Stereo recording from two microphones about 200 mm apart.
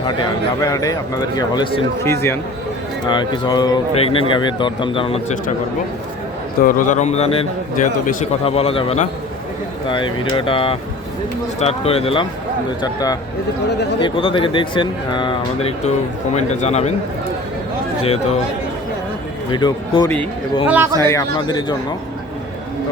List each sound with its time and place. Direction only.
0.0 s speech: 20° left (ahead or behind)
6.7 s a man's voice: 40° left (ahead or behind)
18.0 s a man's voice: 30° left (ahead or behind)
19.5 s speech: 20° left (ahead or behind)
20.7 s a man's voice: 10° right (ahead or behind)
21.0 s speech: 15° left (ahead or behind)